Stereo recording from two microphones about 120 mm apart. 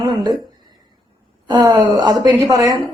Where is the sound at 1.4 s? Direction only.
40° right (ahead or behind).